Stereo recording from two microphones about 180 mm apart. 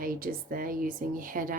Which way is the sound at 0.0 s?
50° right (ahead or behind).